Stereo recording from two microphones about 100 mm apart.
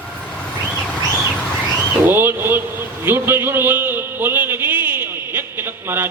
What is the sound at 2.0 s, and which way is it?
A man's voice, 20° right (ahead or behind).